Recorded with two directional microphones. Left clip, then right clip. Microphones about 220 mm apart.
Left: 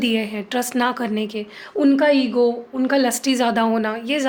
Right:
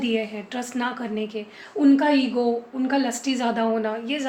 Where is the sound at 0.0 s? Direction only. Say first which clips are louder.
Left 3 dB; 50° left (ahead or behind).